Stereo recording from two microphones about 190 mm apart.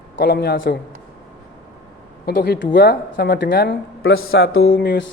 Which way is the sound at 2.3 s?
55° left (ahead or behind).